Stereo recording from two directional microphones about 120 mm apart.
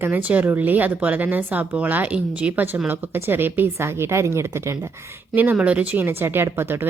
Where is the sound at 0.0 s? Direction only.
15° right (ahead or behind).